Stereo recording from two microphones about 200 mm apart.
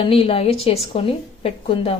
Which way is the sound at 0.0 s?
25° left (ahead or behind).